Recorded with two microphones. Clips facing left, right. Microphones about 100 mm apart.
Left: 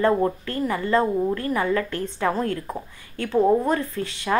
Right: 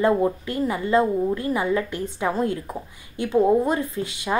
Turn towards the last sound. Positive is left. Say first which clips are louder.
# even
turn(degrees=-15)  # may be behind; listen again after turning